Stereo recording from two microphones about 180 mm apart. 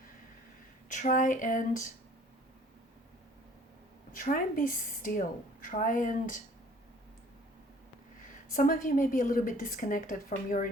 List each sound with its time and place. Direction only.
0.9 s a woman's voice: 45° left (ahead or behind)
4.1 s a woman's voice: 50° left (ahead or behind)
8.5 s a woman's voice: 50° left (ahead or behind)